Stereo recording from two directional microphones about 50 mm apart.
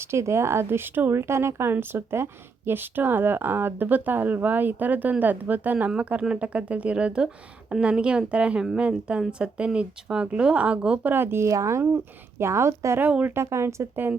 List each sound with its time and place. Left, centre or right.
0.0 s speech: right
1.7 s speech: right
11.0 s speech: right
12.4 s speech: right
13.0 s speech: right
13.3 s speech: right